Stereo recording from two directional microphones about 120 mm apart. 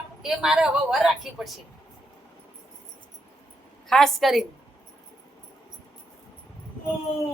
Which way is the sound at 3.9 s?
5° left (ahead or behind).